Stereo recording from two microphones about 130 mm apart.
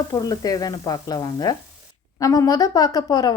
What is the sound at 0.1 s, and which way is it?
Speech, 30° left (ahead or behind).